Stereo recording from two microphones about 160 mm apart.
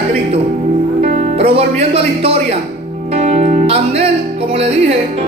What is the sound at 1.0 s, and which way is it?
Music, 50° right (ahead or behind).